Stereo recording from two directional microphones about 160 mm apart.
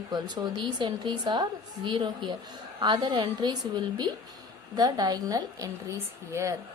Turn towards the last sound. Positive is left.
turn(degrees=-20)  # may be behind; listen again after turning